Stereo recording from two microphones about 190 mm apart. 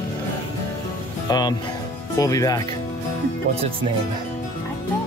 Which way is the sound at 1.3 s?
20° left (ahead or behind).